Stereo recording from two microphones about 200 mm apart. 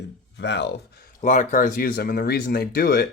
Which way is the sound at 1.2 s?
40° left (ahead or behind).